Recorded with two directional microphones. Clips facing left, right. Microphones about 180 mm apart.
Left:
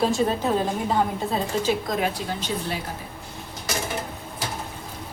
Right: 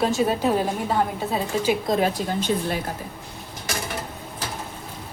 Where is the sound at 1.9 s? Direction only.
35° right (ahead or behind).